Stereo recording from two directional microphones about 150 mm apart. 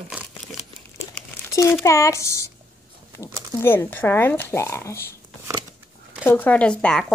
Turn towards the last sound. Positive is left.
turn(degrees=5)  # may be behind; listen again after turning